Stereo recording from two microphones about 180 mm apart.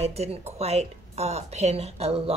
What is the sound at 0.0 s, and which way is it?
Speech, 35° right (ahead or behind).